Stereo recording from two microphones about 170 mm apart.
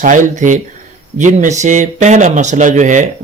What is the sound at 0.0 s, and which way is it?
Speech, 50° right (ahead or behind).